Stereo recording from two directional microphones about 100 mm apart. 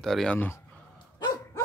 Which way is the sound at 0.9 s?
40° left (ahead or behind).